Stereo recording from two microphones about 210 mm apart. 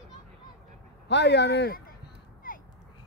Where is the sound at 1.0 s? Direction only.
55° left (ahead or behind).